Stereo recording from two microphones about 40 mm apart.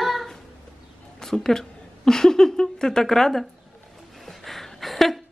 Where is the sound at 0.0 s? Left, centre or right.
Centre.